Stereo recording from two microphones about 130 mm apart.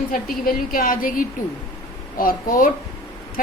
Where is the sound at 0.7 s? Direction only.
90° left.